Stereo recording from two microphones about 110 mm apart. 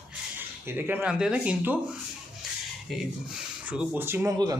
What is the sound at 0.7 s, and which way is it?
Speech, 20° right (ahead or behind).